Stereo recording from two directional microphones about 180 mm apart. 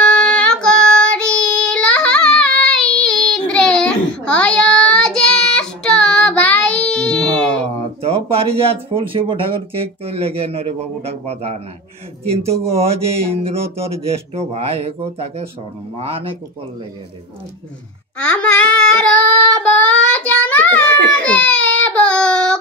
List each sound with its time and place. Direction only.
0.0 s child singing: 5° left (ahead or behind)
7.6 s a sound: 35° right (ahead or behind)
9.1 s speech: 30° right (ahead or behind)
18.2 s child singing: 5° left (ahead or behind)
21.1 s speech: 5° left (ahead or behind)
21.8 s a sound: 5° left (ahead or behind)